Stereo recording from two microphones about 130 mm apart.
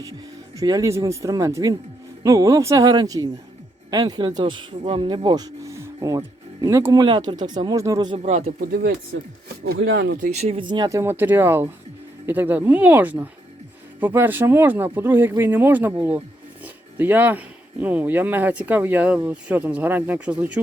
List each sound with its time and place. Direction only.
0.5 s speech: 30° right (ahead or behind)
8.2 s speech: 60° right (ahead or behind)
10.2 s speech: 55° right (ahead or behind)
10.7 s speech: 35° right (ahead or behind)
10.9 s speech: 15° right (ahead or behind)